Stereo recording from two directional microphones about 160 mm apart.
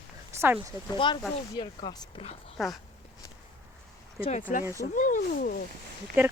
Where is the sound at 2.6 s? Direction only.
Centre (ahead or behind).